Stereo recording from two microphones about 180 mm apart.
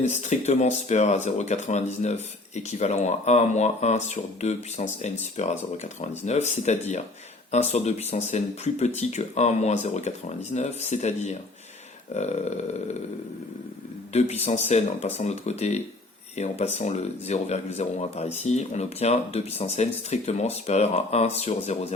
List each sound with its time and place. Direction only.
0.1 s speech: 40° left (ahead or behind)
14.1 s speech: 35° left (ahead or behind)